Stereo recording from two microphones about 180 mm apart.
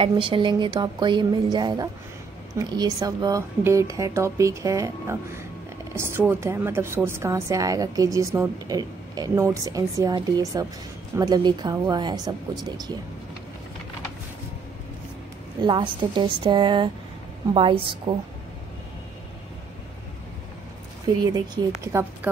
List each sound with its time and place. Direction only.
0.0 s speech: 30° right (ahead or behind)
15.6 s speech: 25° right (ahead or behind)
21.8 s speech: 15° right (ahead or behind)